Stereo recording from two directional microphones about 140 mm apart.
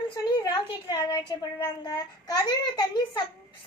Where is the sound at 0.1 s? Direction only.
30° left (ahead or behind).